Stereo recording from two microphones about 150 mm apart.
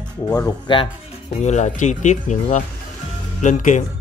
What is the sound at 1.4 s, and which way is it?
A man's voice, 50° left (ahead or behind).